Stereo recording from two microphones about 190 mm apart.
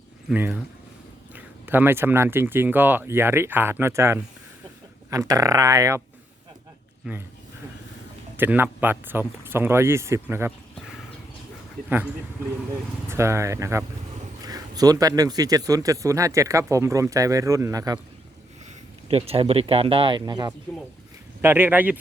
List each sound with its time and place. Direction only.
0.3 s speech: 10° right (ahead or behind)
7.1 s speech: 5° right (ahead or behind)
8.4 s speech: 10° right (ahead or behind)
13.1 s speech: 15° right (ahead or behind)
19.0 s speech: 30° right (ahead or behind)
21.4 s speech: 10° right (ahead or behind)